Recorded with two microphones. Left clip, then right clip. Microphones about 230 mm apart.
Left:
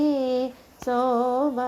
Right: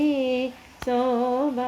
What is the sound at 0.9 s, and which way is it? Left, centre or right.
Female singing, centre.